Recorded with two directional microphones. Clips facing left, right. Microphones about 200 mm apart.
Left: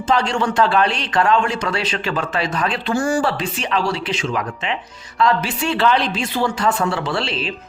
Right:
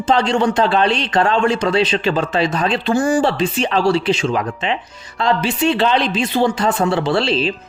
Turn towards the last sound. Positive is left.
turn(degrees=-30)  # may be behind; listen again after turning